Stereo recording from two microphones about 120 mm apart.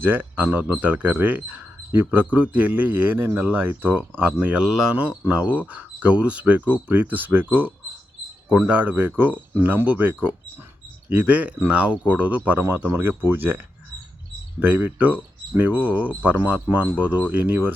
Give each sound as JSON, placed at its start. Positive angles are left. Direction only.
{"t": 0.0, "sound": "a man's voice", "side_deg": -15}
{"t": 14.6, "sound": "a man's voice", "side_deg": -15}